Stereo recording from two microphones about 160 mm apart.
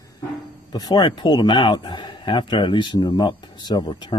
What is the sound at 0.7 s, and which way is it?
A man's voice, 25° left (ahead or behind).